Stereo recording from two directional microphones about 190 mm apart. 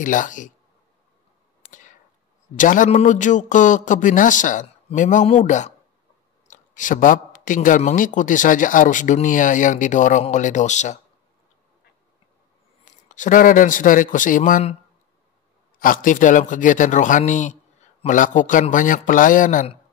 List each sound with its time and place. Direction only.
0.0 s a man's voice: 45° left (ahead or behind)
1.7 s a sound: 45° left (ahead or behind)
2.5 s a man's voice: 45° left (ahead or behind)
13.1 s a man's voice: 45° left (ahead or behind)
15.8 s a man's voice: 45° left (ahead or behind)